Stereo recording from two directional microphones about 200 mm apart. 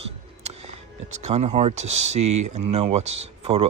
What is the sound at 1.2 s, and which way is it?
Speech, 35° right (ahead or behind).